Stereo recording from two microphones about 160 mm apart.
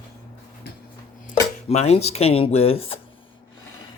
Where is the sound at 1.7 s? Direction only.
40° left (ahead or behind).